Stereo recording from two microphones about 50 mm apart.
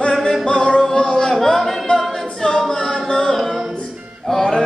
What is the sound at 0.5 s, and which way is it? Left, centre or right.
Music, centre.